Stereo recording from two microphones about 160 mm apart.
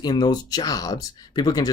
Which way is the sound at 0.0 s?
25° left (ahead or behind).